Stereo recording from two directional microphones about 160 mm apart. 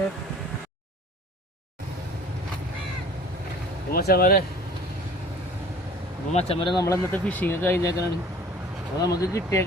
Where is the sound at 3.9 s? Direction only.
70° left (ahead or behind).